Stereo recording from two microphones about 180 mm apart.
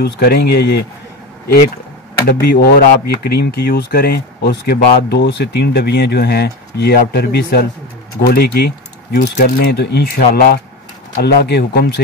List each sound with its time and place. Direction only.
0.0 s speech: 60° left (ahead or behind)
2.4 s speech: 60° left (ahead or behind)